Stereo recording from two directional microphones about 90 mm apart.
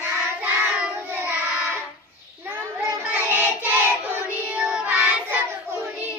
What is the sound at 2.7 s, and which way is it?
Child singing, 20° right (ahead or behind).